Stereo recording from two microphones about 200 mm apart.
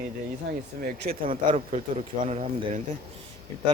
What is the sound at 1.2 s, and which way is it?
Speech, 25° right (ahead or behind).